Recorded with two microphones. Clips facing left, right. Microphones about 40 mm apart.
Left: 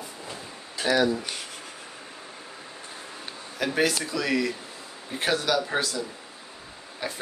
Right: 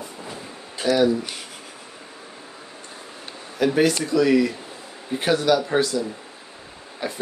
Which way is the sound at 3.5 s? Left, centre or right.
Centre.